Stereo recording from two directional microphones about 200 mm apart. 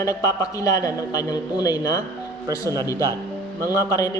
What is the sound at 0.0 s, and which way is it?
A man's voice, 15° left (ahead or behind).